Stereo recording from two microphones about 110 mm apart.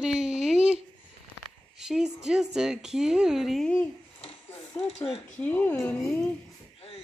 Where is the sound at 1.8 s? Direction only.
5° right (ahead or behind).